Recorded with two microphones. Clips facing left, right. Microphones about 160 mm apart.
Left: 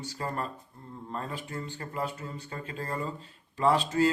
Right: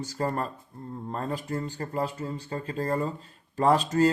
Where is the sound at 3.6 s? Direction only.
45° right (ahead or behind).